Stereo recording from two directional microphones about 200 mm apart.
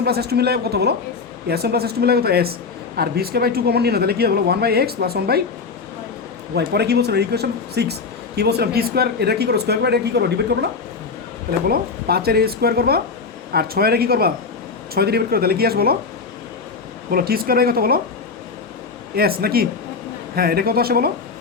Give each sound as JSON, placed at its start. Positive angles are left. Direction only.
{"t": 0.0, "sound": "a man's voice", "side_deg": -50}
{"t": 6.5, "sound": "a man's voice", "side_deg": -55}
{"t": 11.7, "sound": "a man's voice", "side_deg": -50}
{"t": 17.1, "sound": "a man's voice", "side_deg": -50}
{"t": 19.1, "sound": "a man's voice", "side_deg": -50}